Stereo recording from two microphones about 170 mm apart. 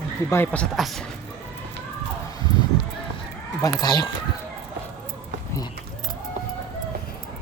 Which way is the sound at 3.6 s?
25° left (ahead or behind).